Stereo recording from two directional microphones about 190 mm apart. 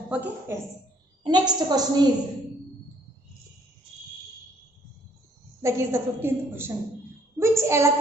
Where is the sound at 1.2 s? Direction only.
20° right (ahead or behind).